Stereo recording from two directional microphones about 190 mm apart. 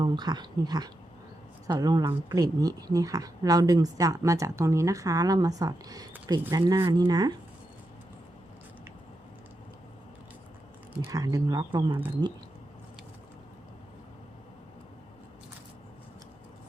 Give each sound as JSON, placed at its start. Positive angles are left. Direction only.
{"t": 0.0, "sound": "speech", "side_deg": -20}
{"t": 11.1, "sound": "speech", "side_deg": -20}